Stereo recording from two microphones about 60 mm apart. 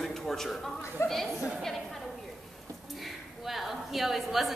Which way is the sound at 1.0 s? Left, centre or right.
Left.